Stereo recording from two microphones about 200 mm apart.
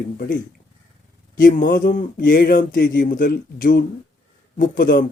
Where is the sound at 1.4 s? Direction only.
40° left (ahead or behind).